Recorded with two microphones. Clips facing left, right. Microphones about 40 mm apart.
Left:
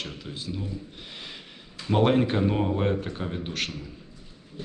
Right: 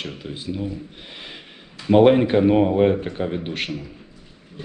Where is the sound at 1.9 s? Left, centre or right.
Right.